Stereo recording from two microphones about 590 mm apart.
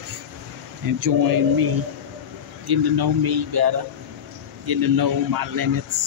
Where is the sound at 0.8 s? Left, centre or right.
Right.